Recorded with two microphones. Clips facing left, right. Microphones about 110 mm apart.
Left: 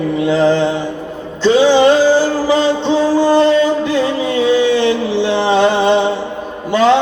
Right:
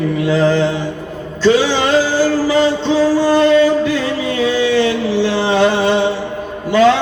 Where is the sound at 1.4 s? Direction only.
20° left (ahead or behind).